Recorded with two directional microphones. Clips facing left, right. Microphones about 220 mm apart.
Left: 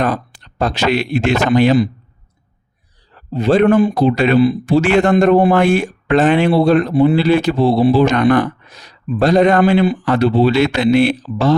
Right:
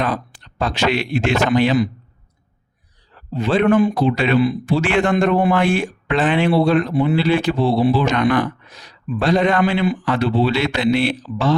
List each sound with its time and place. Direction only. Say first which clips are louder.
0.0 s speech: left 4 dB; 45° left (ahead or behind)
3.2 s speech: left 5 dB; 40° left (ahead or behind)